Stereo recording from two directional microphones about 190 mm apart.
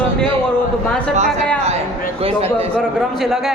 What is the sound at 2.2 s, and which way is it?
Speech, 30° right (ahead or behind).